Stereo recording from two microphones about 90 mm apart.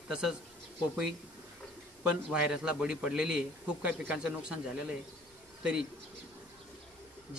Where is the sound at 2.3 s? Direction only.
10° right (ahead or behind).